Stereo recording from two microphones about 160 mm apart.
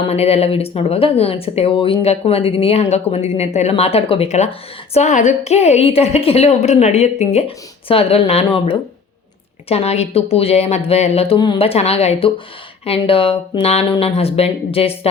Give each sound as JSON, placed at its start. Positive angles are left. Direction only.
{"t": 0.1, "sound": "speech", "side_deg": 40}